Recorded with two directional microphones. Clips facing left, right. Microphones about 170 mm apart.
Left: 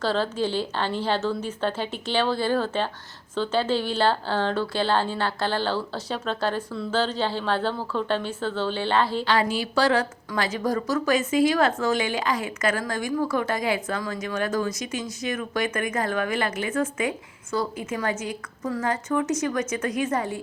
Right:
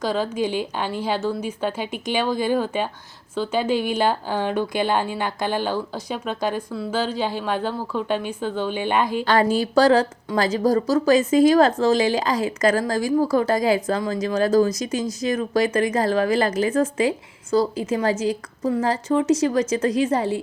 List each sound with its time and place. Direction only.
0.0 s speech: 10° right (ahead or behind)
9.2 s speech: 45° right (ahead or behind); by 20.4 s 30° right (ahead or behind)